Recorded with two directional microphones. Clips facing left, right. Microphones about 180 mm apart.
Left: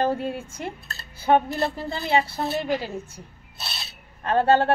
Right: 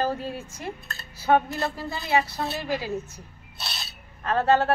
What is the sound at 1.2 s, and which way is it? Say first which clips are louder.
A woman's voice: left 2 dB; 25° left (ahead or behind).